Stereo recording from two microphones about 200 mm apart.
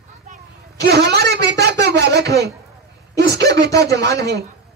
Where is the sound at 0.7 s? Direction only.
55° right (ahead or behind).